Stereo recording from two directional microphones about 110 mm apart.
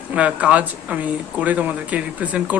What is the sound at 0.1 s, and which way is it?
A woman's voice, 10° right (ahead or behind).